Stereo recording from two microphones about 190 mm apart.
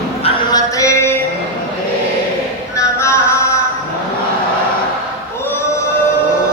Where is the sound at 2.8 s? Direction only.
15° left (ahead or behind).